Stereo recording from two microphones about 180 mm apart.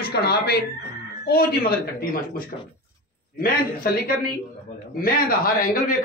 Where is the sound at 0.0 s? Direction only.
60° left (ahead or behind).